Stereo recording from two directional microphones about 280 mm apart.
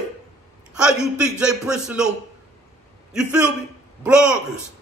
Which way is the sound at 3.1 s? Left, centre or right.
Centre.